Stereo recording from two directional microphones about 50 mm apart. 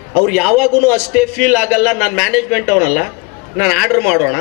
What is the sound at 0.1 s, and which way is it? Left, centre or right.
A man's voice, centre.